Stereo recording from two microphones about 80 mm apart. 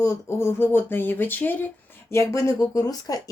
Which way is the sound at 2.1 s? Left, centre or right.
Left.